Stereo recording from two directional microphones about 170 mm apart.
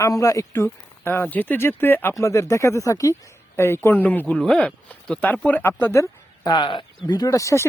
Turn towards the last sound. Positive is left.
turn(degrees=20)  # may be behind; listen again after turning